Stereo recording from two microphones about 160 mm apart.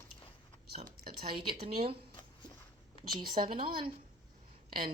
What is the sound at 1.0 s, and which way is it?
Speech, 70° right (ahead or behind).